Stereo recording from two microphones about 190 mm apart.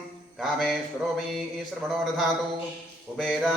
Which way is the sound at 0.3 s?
Centre (ahead or behind).